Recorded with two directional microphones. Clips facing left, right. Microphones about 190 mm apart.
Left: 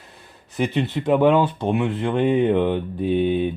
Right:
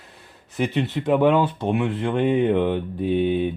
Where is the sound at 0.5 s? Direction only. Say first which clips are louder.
Left 1 dB; 35° left (ahead or behind).